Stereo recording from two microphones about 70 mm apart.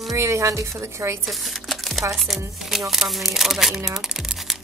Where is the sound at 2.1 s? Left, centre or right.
Centre.